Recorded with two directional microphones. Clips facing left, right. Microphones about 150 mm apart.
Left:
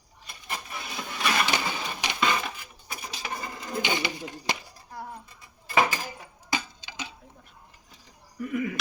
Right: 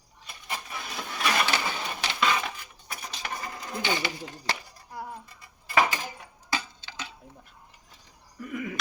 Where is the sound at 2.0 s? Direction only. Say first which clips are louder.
Left 1 dB; 15° left (ahead or behind).